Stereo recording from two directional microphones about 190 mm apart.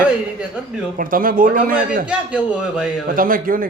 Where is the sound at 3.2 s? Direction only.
45° right (ahead or behind).